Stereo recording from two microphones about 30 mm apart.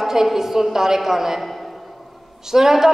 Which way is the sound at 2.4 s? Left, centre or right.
Centre.